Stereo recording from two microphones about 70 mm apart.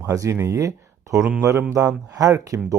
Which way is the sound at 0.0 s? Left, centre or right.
Right.